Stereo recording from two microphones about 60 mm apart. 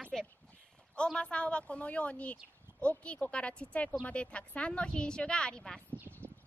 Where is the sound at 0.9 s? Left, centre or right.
Centre.